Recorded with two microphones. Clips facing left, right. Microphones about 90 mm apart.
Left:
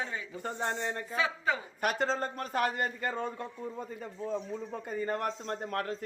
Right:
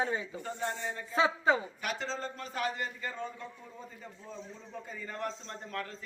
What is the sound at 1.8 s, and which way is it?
A man's voice, 50° left (ahead or behind).